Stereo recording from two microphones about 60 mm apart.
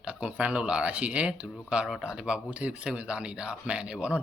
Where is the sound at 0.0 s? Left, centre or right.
Centre.